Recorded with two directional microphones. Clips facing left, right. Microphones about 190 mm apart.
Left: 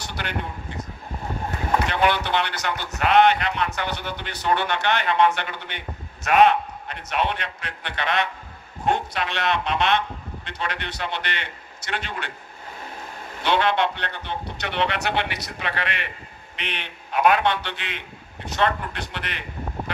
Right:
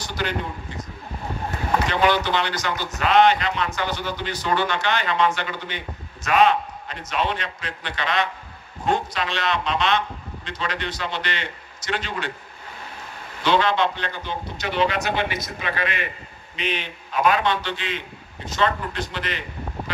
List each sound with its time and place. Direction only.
0.0 s a sound: 60° left (ahead or behind)
1.9 s a man's voice: 60° left (ahead or behind)
13.4 s a man's voice: 60° left (ahead or behind)